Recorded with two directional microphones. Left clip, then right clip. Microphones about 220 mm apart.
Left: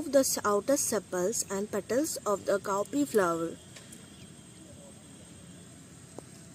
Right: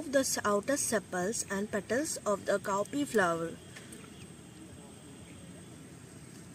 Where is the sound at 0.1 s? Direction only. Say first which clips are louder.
Left 3 dB; 50° left (ahead or behind).